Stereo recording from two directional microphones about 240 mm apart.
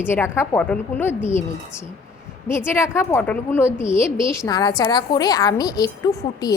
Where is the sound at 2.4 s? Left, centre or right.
Centre.